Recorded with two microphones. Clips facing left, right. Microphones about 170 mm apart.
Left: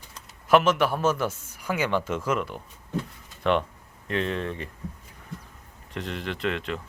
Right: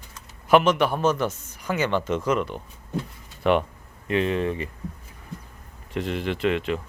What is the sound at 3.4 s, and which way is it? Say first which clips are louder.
A man's voice: right 3 dB; 5° right (ahead or behind).